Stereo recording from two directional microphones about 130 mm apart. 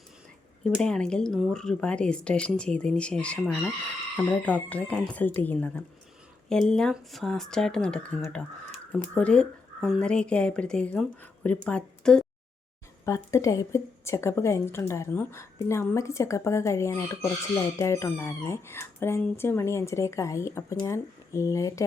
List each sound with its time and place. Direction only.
0.6 s a woman's voice: 5° left (ahead or behind)
9.1 s a woman's voice: 10° left (ahead or behind)
13.1 s a woman's voice: 25° left (ahead or behind)